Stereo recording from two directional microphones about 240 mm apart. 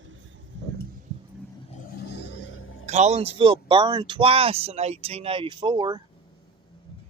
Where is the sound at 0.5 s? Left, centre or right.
Right.